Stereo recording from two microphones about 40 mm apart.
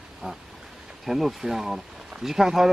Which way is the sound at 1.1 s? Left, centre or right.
Centre.